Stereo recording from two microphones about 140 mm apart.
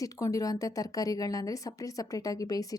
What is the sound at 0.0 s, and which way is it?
Speech, 25° left (ahead or behind).